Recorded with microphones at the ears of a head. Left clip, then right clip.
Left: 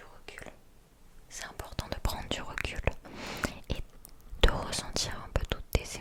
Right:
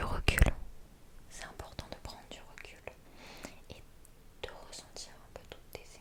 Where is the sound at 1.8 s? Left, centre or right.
Left.